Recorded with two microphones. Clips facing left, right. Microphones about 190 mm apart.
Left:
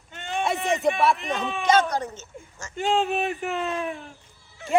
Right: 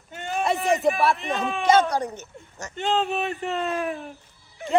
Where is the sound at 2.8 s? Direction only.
5° left (ahead or behind).